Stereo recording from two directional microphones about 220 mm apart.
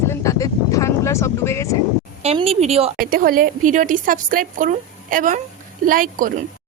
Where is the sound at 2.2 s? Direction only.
25° right (ahead or behind).